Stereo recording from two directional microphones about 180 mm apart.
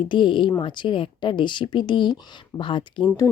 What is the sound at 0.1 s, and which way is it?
Speech, 25° left (ahead or behind).